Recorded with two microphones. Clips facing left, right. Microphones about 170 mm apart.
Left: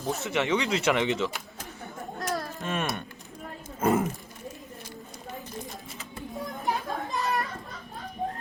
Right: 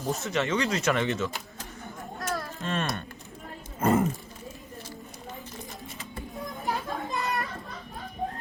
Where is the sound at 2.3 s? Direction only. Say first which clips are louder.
Even; 15° left (ahead or behind).